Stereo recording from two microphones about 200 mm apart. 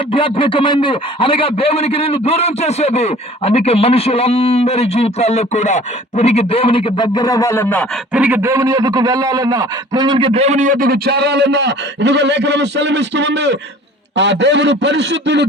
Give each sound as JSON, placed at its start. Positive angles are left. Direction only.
{"t": 0.1, "sound": "a man's voice", "side_deg": 25}
{"t": 8.1, "sound": "a man's voice", "side_deg": -10}